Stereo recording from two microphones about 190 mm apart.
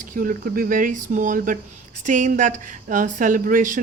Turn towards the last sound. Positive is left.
turn(degrees=-45)  # may be behind; listen again after turning